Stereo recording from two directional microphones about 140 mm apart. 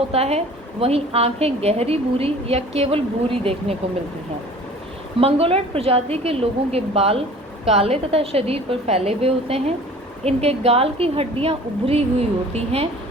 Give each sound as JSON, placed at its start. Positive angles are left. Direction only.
{"t": 0.1, "sound": "a woman's voice", "side_deg": -45}
{"t": 5.2, "sound": "a woman's voice", "side_deg": -45}